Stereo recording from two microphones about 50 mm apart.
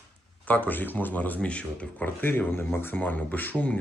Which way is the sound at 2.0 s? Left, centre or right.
Left.